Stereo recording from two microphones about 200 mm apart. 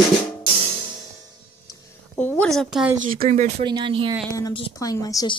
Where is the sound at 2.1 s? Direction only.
5° left (ahead or behind).